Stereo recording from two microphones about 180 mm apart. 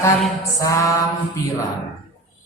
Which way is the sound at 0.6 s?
20° left (ahead or behind).